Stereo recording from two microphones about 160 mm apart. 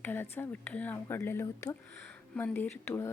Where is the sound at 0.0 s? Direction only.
15° left (ahead or behind).